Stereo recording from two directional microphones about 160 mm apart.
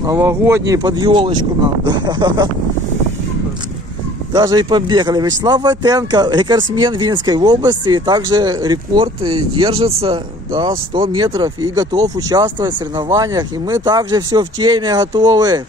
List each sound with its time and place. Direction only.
0.0 s speech: 20° right (ahead or behind)
4.3 s speech: 20° right (ahead or behind)